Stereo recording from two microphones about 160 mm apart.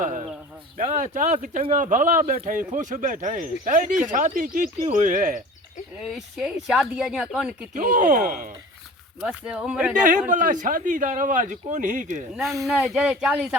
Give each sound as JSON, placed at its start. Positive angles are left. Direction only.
{"t": 0.0, "sound": "a man's voice", "side_deg": -55}
{"t": 6.0, "sound": "speech", "side_deg": 0}
{"t": 7.7, "sound": "speech", "side_deg": -55}
{"t": 9.2, "sound": "speech", "side_deg": -5}
{"t": 10.0, "sound": "a man's voice", "side_deg": -55}
{"t": 12.6, "sound": "speech", "side_deg": -5}